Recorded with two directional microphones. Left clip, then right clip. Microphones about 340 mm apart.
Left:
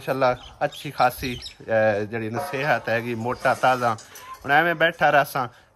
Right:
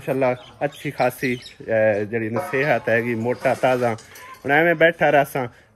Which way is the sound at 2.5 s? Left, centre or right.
Centre.